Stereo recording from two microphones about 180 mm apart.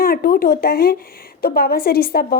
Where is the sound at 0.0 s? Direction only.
55° left (ahead or behind).